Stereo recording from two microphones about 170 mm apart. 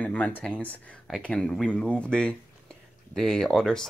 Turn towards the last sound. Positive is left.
turn(degrees=5)  # may be behind; listen again after turning